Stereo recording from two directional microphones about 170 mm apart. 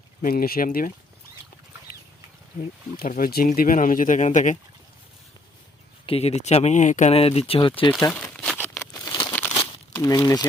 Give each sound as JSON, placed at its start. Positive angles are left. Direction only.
{"t": 0.2, "sound": "speech", "side_deg": 60}
{"t": 3.0, "sound": "speech", "side_deg": 55}
{"t": 6.1, "sound": "speech", "side_deg": 35}
{"t": 7.9, "sound": "crumpling", "side_deg": 10}
{"t": 9.9, "sound": "speech", "side_deg": 20}